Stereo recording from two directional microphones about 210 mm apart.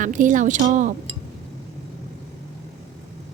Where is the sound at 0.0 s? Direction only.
40° right (ahead or behind).